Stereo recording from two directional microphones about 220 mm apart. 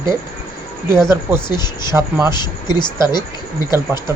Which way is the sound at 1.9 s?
10° right (ahead or behind).